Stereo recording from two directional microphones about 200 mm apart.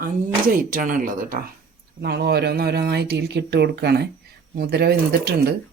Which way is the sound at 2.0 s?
55° right (ahead or behind).